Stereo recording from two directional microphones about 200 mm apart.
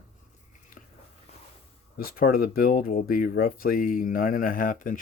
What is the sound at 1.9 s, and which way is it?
Speech, 45° left (ahead or behind).